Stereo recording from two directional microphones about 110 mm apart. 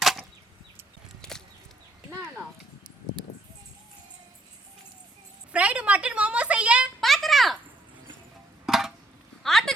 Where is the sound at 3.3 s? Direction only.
65° left (ahead or behind).